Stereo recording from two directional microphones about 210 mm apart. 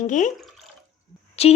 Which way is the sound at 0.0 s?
35° left (ahead or behind).